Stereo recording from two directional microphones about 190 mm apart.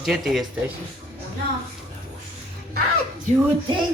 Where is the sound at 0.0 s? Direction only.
Centre (ahead or behind).